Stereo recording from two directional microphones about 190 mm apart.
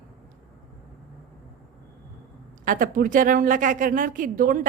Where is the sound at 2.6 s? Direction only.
45° right (ahead or behind).